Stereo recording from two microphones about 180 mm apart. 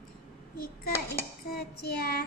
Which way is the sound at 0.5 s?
55° left (ahead or behind).